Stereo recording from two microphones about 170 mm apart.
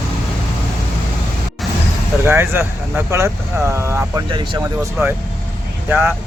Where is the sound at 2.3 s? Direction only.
15° right (ahead or behind).